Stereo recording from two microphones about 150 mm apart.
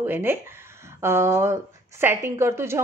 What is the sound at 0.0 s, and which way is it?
A woman's voice, 15° right (ahead or behind).